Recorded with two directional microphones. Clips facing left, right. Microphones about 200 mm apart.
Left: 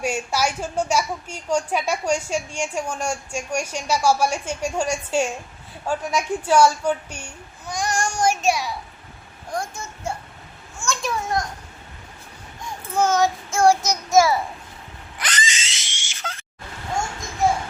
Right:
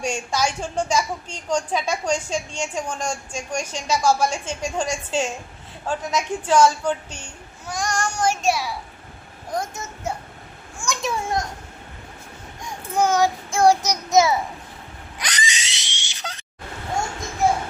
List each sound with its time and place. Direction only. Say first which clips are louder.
0.0 s a woman's voice: left 1 dB; 10° left (ahead or behind)
7.7 s child singing: left 1 dB; centre (ahead or behind)
7.9 s a woman's voice: left 1 dB; 10° left (ahead or behind)
8.4 s child singing: even; 5° right (ahead or behind)
9.5 s a child's voice: right 1 dB; 20° right (ahead or behind)
13.0 s child singing: even; 15° right (ahead or behind)
15.2 s a sound: left 1 dB; 15° right (ahead or behind)